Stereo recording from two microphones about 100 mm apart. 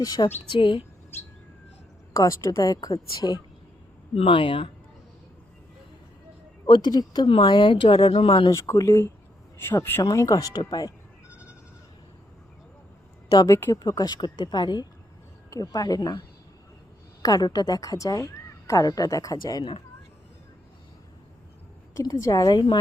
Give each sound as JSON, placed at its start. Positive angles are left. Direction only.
{"t": 0.0, "sound": "speech", "side_deg": 40}
{"t": 0.5, "sound": "speech", "side_deg": 60}
{"t": 2.1, "sound": "speech", "side_deg": 40}
{"t": 4.3, "sound": "speech", "side_deg": 60}
{"t": 6.7, "sound": "speech", "side_deg": 50}
{"t": 7.3, "sound": "speech", "side_deg": 55}
{"t": 8.4, "sound": "speech", "side_deg": 30}
{"t": 10.0, "sound": "speech", "side_deg": 35}
{"t": 13.3, "sound": "speech", "side_deg": 35}
{"t": 15.4, "sound": "speech", "side_deg": 35}
{"t": 17.2, "sound": "speech", "side_deg": 40}
{"t": 21.9, "sound": "speech", "side_deg": 35}